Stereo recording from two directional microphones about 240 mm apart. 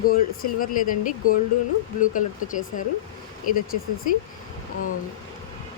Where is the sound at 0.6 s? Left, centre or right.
Left.